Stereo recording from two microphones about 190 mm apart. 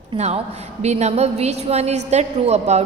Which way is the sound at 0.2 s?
35° right (ahead or behind).